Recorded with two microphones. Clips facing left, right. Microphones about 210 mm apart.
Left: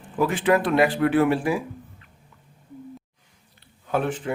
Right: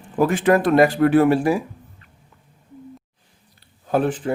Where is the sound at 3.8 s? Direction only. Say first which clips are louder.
Right 5 dB; 35° right (ahead or behind).